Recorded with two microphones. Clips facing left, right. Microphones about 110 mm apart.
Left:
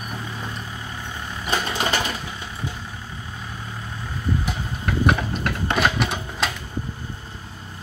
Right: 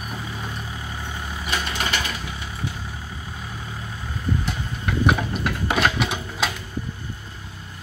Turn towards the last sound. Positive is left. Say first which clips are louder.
# even
turn(degrees=0)  # may be behind; listen again after turning